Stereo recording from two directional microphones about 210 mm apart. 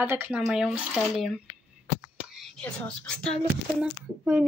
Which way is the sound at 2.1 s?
Centre (ahead or behind).